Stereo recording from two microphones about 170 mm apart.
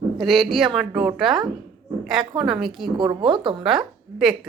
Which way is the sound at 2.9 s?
25° right (ahead or behind).